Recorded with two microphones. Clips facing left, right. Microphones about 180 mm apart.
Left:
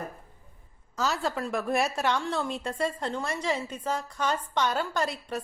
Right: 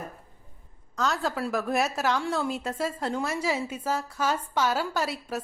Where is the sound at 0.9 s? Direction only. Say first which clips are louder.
Right 1 dB; centre (ahead or behind).